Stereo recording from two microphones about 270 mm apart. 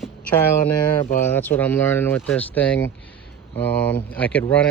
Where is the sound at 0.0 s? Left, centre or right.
Centre.